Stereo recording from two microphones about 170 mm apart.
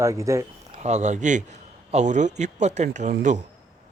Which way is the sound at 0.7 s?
45° right (ahead or behind).